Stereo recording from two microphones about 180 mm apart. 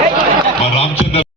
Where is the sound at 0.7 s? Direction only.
35° left (ahead or behind).